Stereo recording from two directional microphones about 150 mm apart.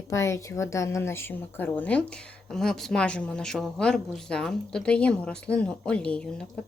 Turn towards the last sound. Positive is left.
turn(degrees=5)  # may be behind; listen again after turning